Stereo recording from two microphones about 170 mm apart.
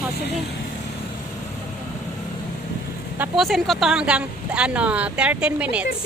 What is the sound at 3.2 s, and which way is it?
Speech, centre (ahead or behind).